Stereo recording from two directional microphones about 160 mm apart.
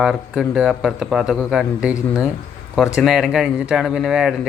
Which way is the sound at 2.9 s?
Centre (ahead or behind).